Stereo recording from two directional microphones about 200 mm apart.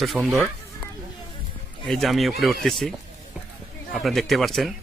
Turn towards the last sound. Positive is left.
turn(degrees=0)  # may be behind; listen again after turning